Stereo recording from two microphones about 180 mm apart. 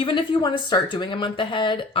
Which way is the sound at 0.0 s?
25° left (ahead or behind).